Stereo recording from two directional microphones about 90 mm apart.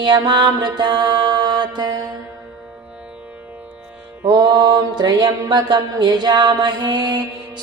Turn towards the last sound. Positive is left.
turn(degrees=-50)  # may be behind; listen again after turning